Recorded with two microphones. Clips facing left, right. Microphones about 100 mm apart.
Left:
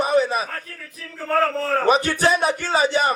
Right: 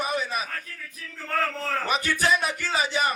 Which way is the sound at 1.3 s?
35° left (ahead or behind).